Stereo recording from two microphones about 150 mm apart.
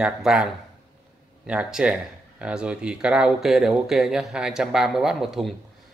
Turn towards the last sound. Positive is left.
turn(degrees=0)  # may be behind; listen again after turning